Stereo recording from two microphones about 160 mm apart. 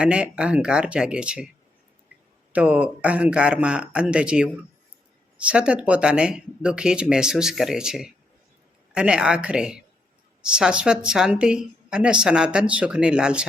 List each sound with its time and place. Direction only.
0.0 s speech: 5° right (ahead or behind)
2.5 s a woman's voice: 10° right (ahead or behind)